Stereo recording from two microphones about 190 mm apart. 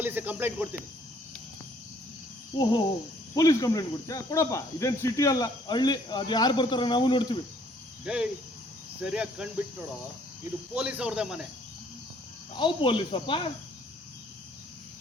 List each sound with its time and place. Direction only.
0.0 s speech: 10° right (ahead or behind)
3.3 s speech: 20° left (ahead or behind)
8.0 s a man's voice: 5° right (ahead or behind)
10.8 s a man's voice: 5° right (ahead or behind)
12.5 s speech: 25° left (ahead or behind)